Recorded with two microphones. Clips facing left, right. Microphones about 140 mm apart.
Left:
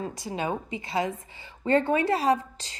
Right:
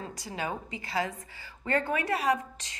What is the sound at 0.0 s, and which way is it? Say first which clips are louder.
A woman's voice: left 5 dB; 25° left (ahead or behind).